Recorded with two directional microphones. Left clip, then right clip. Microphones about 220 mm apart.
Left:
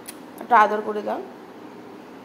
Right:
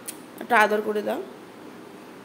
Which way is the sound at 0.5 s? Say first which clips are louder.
Left 3 dB; 20° right (ahead or behind).